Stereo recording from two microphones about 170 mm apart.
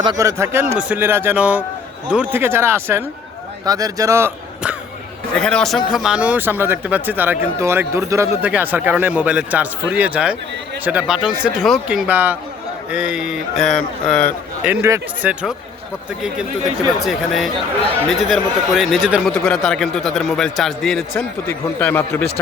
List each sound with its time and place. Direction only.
0.0 s speech: 20° right (ahead or behind)
5.3 s a man's voice: 5° left (ahead or behind)
14.6 s speech: 10° right (ahead or behind)
17.0 s a man's voice: centre (ahead or behind)
21.2 s speech: 10° left (ahead or behind)